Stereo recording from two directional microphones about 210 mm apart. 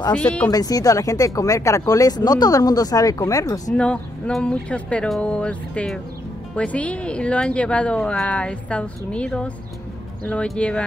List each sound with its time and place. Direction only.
0.1 s speech: 5° left (ahead or behind)
0.5 s speech: 15° left (ahead or behind)
3.7 s speech: 5° left (ahead or behind)